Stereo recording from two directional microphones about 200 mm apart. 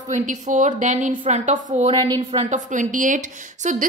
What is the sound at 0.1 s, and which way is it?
A woman's voice, 40° right (ahead or behind).